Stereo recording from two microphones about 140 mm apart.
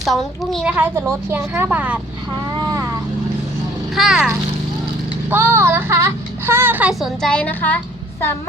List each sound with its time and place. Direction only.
0.0 s a child's voice: centre (ahead or behind)
0.8 s speech: 15° right (ahead or behind)
2.6 s vehicle: 25° right (ahead or behind)
3.9 s a child's voice: 5° right (ahead or behind)
5.3 s speech: 20° right (ahead or behind)
7.2 s a woman's voice: 5° left (ahead or behind)